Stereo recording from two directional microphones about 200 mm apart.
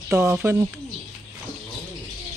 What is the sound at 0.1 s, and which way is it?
Speech, 15° right (ahead or behind).